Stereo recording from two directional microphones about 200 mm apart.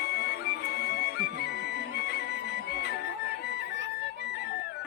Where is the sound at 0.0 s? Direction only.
55° left (ahead or behind).